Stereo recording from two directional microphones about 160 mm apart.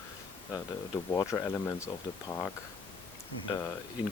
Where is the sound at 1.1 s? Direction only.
15° left (ahead or behind).